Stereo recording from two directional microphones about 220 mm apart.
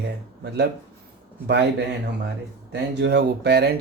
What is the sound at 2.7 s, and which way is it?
Speech, 50° right (ahead or behind).